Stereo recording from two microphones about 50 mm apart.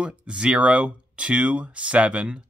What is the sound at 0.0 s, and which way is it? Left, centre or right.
Speech, right.